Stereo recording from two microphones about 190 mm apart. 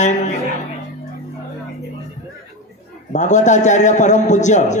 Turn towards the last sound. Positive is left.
turn(degrees=40)  # may be behind; listen again after turning